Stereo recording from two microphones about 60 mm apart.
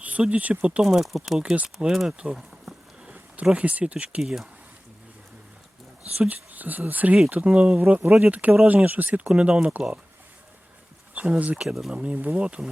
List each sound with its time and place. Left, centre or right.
0.0 s speech: right
0.9 s speech: centre
2.1 s insect: centre
3.5 s speech: right
4.2 s speech: centre
6.1 s speech: right
7.8 s speech: right
11.1 s speech: right
11.6 s speech: centre
12.0 s speech: right